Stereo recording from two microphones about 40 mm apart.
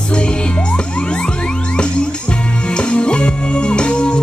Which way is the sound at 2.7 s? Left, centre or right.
Left.